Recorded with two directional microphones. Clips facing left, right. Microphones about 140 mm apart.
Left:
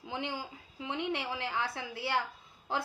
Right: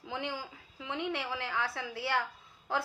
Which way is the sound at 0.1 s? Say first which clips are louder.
Even; 20° left (ahead or behind).